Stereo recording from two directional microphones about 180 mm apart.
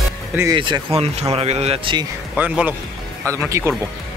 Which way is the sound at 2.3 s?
10° right (ahead or behind).